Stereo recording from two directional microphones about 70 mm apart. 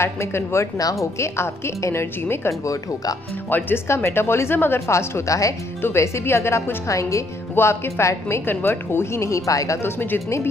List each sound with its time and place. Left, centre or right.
0.0 s a woman's voice: left
5.8 s a woman's voice: left
7.5 s a woman's voice: left
9.8 s a woman's voice: left